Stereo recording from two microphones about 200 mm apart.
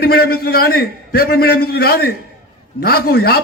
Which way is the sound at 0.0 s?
50° left (ahead or behind).